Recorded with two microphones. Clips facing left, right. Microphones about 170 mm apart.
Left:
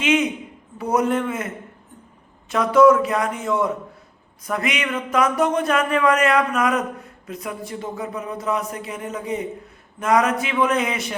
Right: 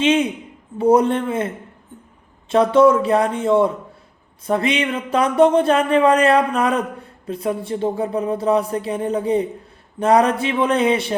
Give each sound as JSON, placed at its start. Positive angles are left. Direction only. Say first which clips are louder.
{"t": 0.0, "sound": "a man's voice", "louder": "right 3 dB", "side_deg": -30}
{"t": 2.5, "sound": "a man's voice", "louder": "right 1 dB", "side_deg": -30}